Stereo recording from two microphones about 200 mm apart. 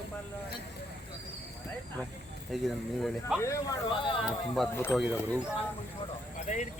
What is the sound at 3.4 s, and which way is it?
Speech, 15° left (ahead or behind).